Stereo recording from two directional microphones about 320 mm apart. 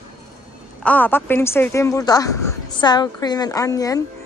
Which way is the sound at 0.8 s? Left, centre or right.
Centre.